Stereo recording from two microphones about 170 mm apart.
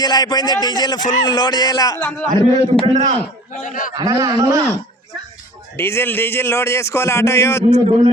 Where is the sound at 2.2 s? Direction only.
50° right (ahead or behind).